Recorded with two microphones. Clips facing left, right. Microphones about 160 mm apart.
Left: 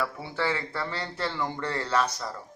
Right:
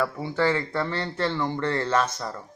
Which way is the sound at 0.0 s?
45° right (ahead or behind).